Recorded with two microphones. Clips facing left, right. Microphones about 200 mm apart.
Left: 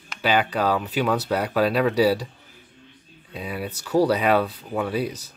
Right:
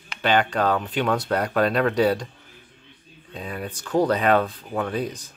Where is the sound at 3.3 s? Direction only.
5° left (ahead or behind).